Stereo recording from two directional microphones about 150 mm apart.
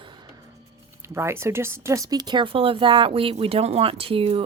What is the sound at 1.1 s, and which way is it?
Speech, 15° right (ahead or behind).